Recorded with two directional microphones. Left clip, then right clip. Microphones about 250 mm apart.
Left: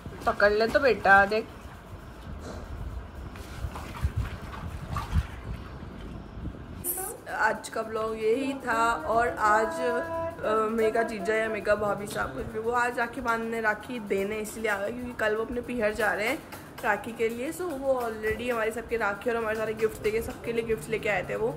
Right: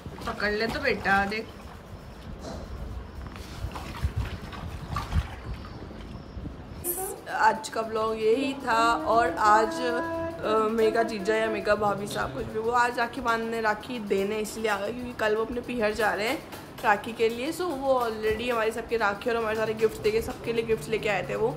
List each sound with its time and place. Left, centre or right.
0.2 s speech: centre
7.2 s speech: centre